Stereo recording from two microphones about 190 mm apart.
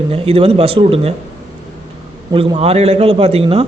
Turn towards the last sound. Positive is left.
turn(degrees=-35)  # may be behind; listen again after turning